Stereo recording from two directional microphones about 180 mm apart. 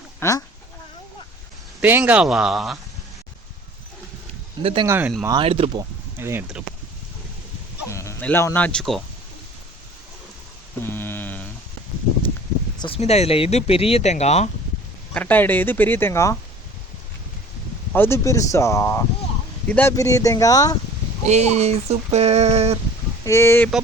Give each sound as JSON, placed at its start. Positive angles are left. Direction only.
{"t": 0.2, "sound": "speech", "side_deg": 20}
{"t": 1.8, "sound": "speech", "side_deg": -10}
{"t": 4.6, "sound": "a sound", "side_deg": -30}
{"t": 4.9, "sound": "speech", "side_deg": -10}
{"t": 5.4, "sound": "speech", "side_deg": -30}
{"t": 6.1, "sound": "speech", "side_deg": -15}
{"t": 7.9, "sound": "speech", "side_deg": 15}
{"t": 10.8, "sound": "a sound", "side_deg": 10}
{"t": 12.8, "sound": "speech", "side_deg": 35}
{"t": 15.1, "sound": "speech", "side_deg": 10}
{"t": 17.9, "sound": "speech", "side_deg": 15}
{"t": 21.2, "sound": "a sound", "side_deg": -40}
{"t": 23.2, "sound": "speech", "side_deg": 15}